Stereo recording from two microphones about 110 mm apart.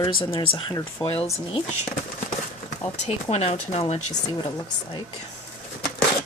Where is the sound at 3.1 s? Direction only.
65° left (ahead or behind).